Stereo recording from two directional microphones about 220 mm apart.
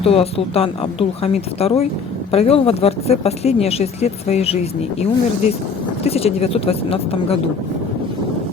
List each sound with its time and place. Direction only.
0.0 s speech: 25° left (ahead or behind)